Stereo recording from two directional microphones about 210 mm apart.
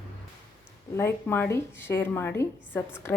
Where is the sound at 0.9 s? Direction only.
10° left (ahead or behind).